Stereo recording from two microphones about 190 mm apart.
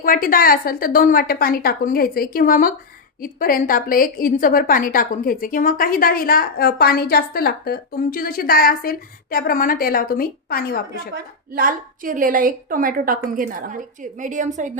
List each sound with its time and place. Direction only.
0.0 s a woman's voice: 50° left (ahead or behind)
11.1 s a woman's voice: 50° right (ahead or behind)